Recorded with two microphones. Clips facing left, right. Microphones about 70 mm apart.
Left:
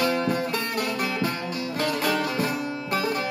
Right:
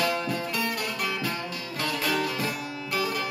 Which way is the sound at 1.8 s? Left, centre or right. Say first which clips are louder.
Left 2 dB; left.